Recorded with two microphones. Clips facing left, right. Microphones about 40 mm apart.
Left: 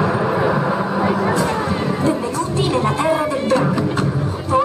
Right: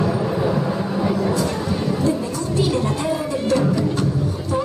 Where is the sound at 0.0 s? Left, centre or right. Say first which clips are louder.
Left 3 dB; left.